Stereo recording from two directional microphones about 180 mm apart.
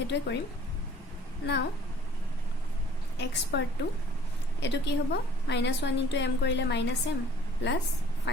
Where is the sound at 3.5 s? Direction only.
75° left (ahead or behind).